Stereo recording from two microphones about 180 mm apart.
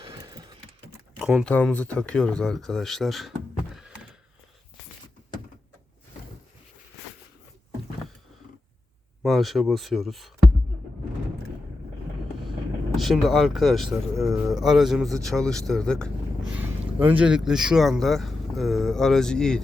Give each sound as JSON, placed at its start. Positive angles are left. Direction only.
{"t": 0.0, "sound": "a sound", "side_deg": -25}
{"t": 0.9, "sound": "typing", "side_deg": -5}
{"t": 1.5, "sound": "speech", "side_deg": 5}
{"t": 9.2, "sound": "speech", "side_deg": 0}
{"t": 13.0, "sound": "speech", "side_deg": 0}
{"t": 14.2, "sound": "speech", "side_deg": -15}
{"t": 14.5, "sound": "speech", "side_deg": 0}
{"t": 16.6, "sound": "speech", "side_deg": -10}